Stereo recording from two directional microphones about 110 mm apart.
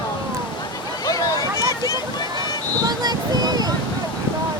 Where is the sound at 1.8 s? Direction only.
35° left (ahead or behind).